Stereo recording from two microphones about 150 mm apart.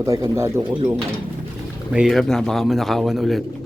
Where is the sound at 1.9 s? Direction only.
Centre (ahead or behind).